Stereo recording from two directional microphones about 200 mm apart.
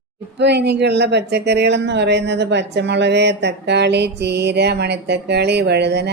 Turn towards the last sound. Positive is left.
turn(degrees=-55)  # may be behind; listen again after turning